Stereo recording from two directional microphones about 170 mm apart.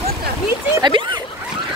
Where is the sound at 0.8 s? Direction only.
25° right (ahead or behind).